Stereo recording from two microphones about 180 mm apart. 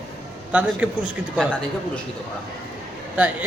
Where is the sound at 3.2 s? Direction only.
10° right (ahead or behind).